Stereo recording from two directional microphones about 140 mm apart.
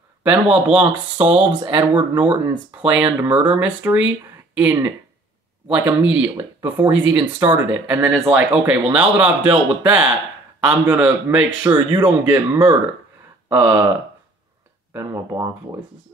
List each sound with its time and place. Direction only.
0.2 s speech: 10° right (ahead or behind)
1.1 s speech: 40° right (ahead or behind)
1.8 s speech: 10° right (ahead or behind)